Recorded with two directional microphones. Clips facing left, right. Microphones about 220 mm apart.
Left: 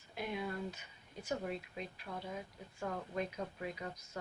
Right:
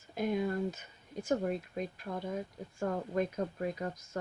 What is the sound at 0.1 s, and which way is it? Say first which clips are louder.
Speech: right 8 dB; 45° right (ahead or behind).